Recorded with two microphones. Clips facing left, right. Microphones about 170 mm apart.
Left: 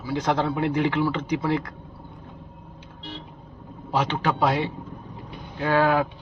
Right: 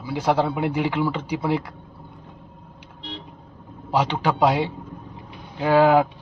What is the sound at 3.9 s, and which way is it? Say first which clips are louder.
Speech: right 2 dB; 10° right (ahead or behind).